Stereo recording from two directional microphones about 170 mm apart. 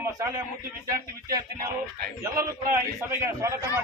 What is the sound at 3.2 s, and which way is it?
Speech, 15° right (ahead or behind).